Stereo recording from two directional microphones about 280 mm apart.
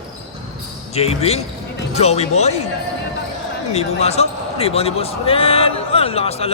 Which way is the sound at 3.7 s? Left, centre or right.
Left.